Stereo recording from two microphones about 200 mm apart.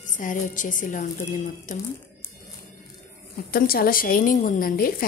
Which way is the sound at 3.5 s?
50° left (ahead or behind).